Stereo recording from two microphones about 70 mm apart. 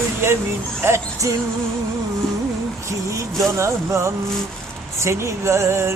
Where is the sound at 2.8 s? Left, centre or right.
Right.